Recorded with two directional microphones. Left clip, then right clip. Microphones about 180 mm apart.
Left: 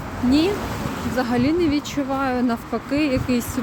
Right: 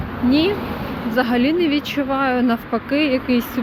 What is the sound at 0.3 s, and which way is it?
Speech, 20° left (ahead or behind).